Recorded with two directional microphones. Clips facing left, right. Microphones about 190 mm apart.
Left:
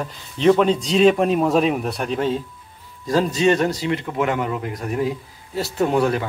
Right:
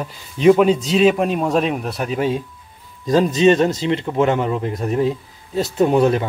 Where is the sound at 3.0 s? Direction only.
20° right (ahead or behind).